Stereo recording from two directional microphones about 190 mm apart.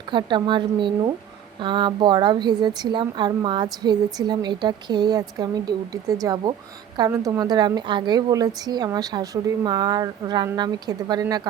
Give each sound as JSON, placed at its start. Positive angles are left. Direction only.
{"t": 0.1, "sound": "a woman's voice", "side_deg": -25}